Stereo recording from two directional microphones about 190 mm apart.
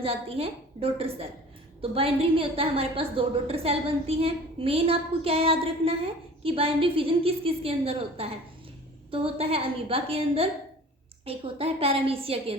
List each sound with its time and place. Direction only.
0.0 s a woman's voice: 30° right (ahead or behind)